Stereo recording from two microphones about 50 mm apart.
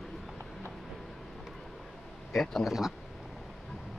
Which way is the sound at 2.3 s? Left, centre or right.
Centre.